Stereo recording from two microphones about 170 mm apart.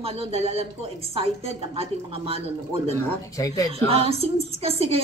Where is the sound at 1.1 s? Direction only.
35° right (ahead or behind).